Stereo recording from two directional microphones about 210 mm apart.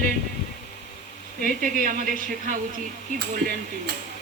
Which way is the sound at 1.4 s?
40° right (ahead or behind).